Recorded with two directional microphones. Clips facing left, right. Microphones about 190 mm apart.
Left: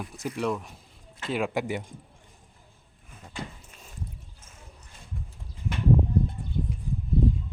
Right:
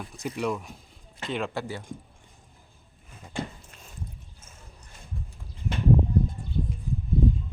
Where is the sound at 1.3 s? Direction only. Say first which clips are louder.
Left 3 dB; 15° left (ahead or behind).